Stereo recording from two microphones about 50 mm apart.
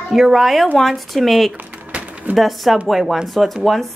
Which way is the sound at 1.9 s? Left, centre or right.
Right.